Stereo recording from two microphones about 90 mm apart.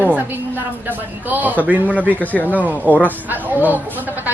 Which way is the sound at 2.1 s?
20° left (ahead or behind).